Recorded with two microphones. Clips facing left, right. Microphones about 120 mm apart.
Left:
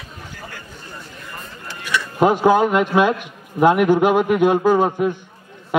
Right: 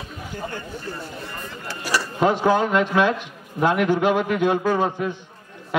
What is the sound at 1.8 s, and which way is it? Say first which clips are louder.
Speech: left 1 dB; 35° right (ahead or behind).